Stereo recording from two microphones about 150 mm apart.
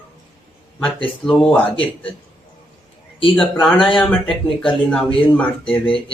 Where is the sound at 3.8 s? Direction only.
35° left (ahead or behind).